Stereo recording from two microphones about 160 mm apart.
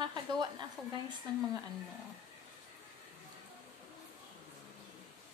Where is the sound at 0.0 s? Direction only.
30° right (ahead or behind).